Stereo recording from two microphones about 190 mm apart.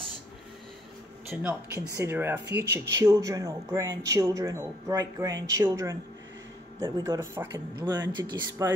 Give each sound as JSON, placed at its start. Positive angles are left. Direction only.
{"t": 1.3, "sound": "speech", "side_deg": -10}